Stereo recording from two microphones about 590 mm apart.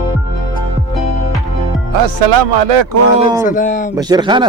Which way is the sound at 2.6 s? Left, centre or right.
Right.